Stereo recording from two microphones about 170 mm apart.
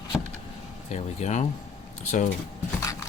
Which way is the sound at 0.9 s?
40° left (ahead or behind).